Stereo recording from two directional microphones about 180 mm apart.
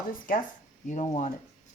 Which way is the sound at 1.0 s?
35° left (ahead or behind).